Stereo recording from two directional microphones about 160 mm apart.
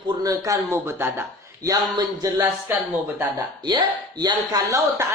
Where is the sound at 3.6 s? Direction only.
30° right (ahead or behind).